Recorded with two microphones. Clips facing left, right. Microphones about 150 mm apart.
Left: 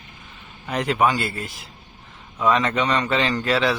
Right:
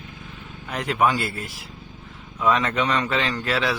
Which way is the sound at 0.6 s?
Centre (ahead or behind).